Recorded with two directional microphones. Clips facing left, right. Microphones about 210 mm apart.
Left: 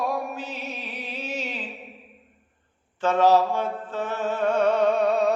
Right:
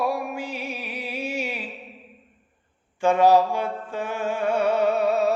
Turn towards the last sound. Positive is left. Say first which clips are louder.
# even
turn(degrees=-5)  # may be behind; listen again after turning